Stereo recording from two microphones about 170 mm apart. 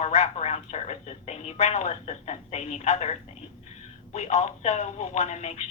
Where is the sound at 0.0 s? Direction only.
40° left (ahead or behind).